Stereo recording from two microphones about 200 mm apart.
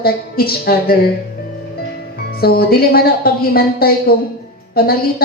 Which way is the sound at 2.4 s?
50° left (ahead or behind).